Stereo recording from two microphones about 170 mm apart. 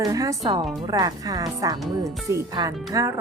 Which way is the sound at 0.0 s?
20° right (ahead or behind).